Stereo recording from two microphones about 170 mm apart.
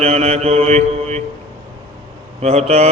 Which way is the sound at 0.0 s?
40° right (ahead or behind).